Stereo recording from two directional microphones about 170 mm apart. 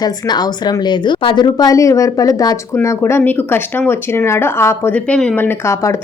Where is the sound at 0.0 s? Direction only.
25° left (ahead or behind).